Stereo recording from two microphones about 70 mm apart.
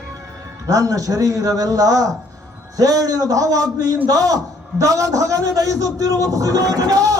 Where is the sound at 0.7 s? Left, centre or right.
Right.